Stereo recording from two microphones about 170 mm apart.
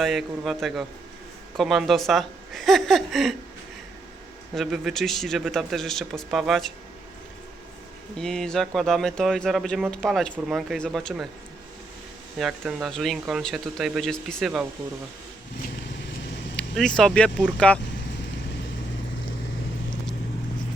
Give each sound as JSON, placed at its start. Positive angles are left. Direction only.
{"t": 0.0, "sound": "speech", "side_deg": 0}
{"t": 4.5, "sound": "speech", "side_deg": 0}
{"t": 8.1, "sound": "speech", "side_deg": 5}
{"t": 12.4, "sound": "speech", "side_deg": 0}
{"t": 15.9, "sound": "vehicle", "side_deg": 90}
{"t": 16.6, "sound": "speech", "side_deg": 5}